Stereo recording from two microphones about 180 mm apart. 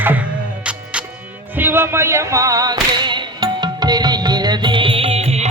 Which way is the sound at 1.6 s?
10° right (ahead or behind).